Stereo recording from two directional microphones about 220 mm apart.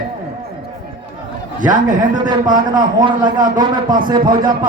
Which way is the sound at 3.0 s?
20° right (ahead or behind).